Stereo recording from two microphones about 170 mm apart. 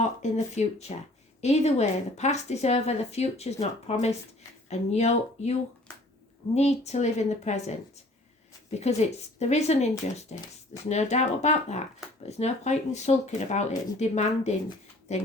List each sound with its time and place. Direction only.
0.0 s a woman's voice: 40° left (ahead or behind)
8.8 s a woman's voice: 40° left (ahead or behind)